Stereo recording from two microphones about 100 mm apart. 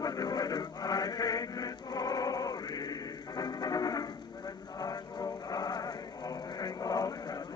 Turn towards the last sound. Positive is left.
turn(degrees=40)  # may be behind; listen again after turning